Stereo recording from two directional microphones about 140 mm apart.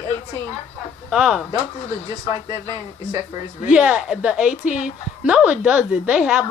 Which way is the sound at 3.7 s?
5° right (ahead or behind).